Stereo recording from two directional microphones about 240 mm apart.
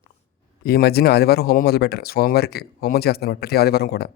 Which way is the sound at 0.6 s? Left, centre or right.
Left.